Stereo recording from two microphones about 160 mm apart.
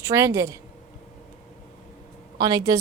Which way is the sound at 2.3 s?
25° right (ahead or behind).